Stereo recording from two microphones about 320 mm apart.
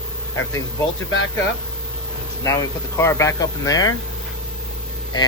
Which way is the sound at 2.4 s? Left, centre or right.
Centre.